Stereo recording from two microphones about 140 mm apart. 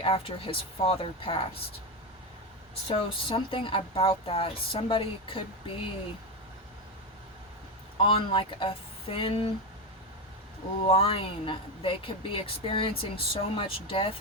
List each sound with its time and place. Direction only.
0.0 s speech: 40° left (ahead or behind)
2.8 s speech: 40° left (ahead or behind)
7.9 s speech: 40° left (ahead or behind)
10.8 s speech: 45° left (ahead or behind)